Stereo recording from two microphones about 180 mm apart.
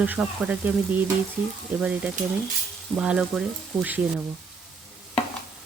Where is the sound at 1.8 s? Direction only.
5° right (ahead or behind).